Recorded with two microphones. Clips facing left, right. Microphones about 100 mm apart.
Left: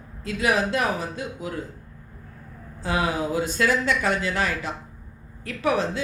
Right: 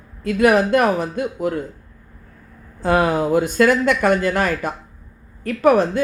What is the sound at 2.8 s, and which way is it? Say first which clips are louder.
Speech: right 8 dB; 55° right (ahead or behind).